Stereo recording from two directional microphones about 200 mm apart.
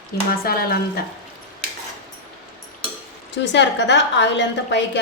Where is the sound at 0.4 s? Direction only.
50° left (ahead or behind).